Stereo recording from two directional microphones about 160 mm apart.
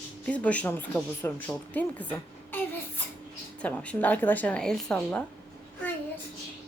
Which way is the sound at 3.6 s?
10° left (ahead or behind).